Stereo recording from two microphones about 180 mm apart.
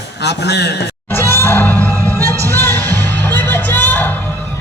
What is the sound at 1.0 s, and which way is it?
Music, 10° left (ahead or behind).